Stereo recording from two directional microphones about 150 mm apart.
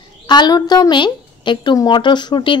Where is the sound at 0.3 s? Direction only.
30° left (ahead or behind).